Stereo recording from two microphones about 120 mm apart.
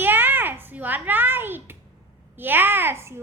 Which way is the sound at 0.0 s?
15° right (ahead or behind).